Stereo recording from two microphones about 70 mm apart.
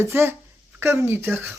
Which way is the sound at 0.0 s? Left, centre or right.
Right.